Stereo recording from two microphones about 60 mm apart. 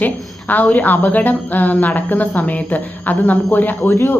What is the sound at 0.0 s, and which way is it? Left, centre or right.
Speech, left.